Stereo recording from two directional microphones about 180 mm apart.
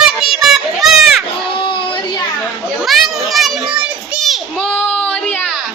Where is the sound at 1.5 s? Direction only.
25° left (ahead or behind).